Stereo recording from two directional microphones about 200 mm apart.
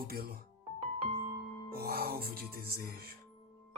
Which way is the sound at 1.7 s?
50° right (ahead or behind).